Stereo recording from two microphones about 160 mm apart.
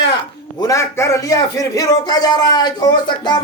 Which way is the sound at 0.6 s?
20° left (ahead or behind).